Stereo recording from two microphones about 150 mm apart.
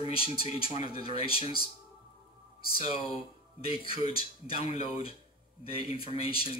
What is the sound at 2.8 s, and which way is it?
Speech, 40° left (ahead or behind).